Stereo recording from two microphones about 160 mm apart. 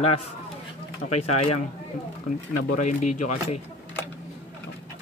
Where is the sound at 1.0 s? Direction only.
45° left (ahead or behind).